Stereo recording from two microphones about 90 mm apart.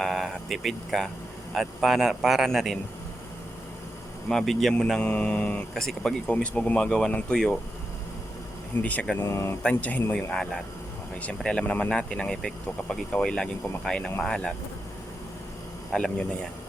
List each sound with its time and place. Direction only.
0.0 s speech: centre (ahead or behind)
4.3 s speech: 5° left (ahead or behind)
8.8 s speech: 15° left (ahead or behind)
9.2 s speech: 30° left (ahead or behind)
9.6 s speech: 15° left (ahead or behind)
15.9 s speech: 5° left (ahead or behind)